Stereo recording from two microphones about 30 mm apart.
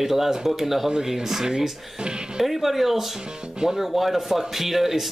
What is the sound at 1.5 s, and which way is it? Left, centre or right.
Speech, right.